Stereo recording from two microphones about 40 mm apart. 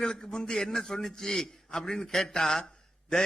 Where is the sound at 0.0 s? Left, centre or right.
Centre.